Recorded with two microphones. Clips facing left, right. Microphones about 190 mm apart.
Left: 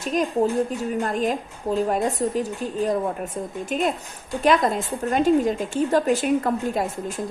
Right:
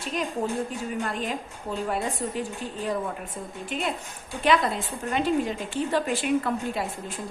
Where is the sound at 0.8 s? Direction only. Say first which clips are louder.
Left 6 dB; 40° left (ahead or behind).